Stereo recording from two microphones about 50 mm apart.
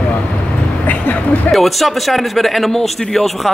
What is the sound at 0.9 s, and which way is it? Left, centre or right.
Vehicle, left.